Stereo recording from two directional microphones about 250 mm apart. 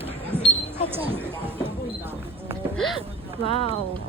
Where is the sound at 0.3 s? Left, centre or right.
Centre.